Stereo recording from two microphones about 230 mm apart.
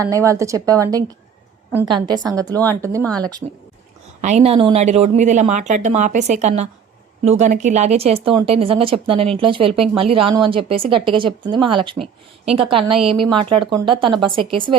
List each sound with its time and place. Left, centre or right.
0.0 s speech: centre
3.0 s speech: centre
4.2 s speech: right